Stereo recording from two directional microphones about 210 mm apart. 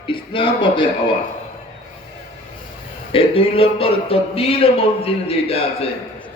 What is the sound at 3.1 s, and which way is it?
Music, 25° left (ahead or behind).